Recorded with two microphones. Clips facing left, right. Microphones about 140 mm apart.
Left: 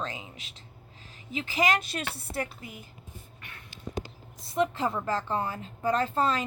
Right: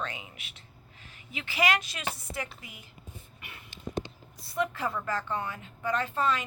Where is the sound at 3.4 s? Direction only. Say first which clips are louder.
Even; 10° right (ahead or behind).